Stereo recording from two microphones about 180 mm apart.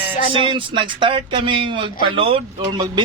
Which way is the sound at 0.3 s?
30° right (ahead or behind).